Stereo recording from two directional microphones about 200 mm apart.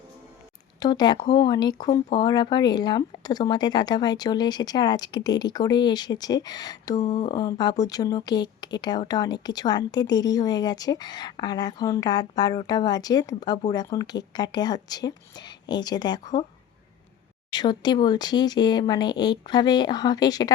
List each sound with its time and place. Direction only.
0.8 s speech: 20° left (ahead or behind)
17.5 s speech: 20° left (ahead or behind)